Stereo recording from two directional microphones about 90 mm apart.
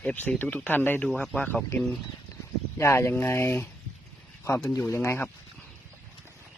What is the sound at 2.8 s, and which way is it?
Speech, 30° left (ahead or behind).